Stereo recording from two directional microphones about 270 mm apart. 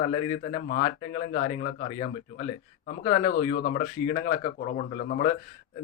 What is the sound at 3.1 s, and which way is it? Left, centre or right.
A man's voice, left.